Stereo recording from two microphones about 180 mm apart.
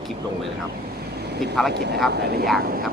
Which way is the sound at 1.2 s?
65° right (ahead or behind).